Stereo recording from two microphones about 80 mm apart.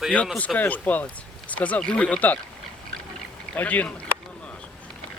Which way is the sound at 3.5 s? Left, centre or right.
Centre.